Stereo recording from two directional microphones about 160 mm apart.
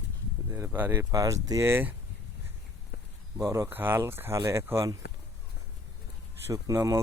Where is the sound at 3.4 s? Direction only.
20° right (ahead or behind).